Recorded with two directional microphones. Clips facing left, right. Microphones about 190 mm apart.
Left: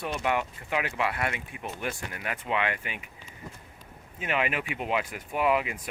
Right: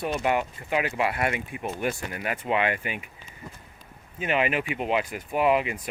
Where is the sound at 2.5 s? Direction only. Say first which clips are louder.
Right 4 dB; 40° right (ahead or behind).